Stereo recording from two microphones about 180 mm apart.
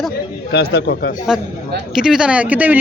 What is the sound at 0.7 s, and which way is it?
Speech, 65° left (ahead or behind).